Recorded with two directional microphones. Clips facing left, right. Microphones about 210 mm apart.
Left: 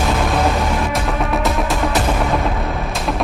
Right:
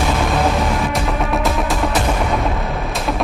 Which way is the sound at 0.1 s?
Centre (ahead or behind).